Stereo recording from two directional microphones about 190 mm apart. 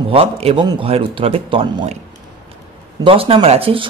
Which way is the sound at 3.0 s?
30° right (ahead or behind).